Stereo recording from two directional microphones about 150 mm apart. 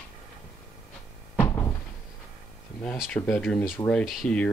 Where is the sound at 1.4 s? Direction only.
15° left (ahead or behind).